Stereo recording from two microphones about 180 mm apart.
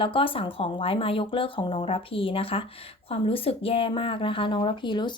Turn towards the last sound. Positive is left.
turn(degrees=25)  # may be behind; listen again after turning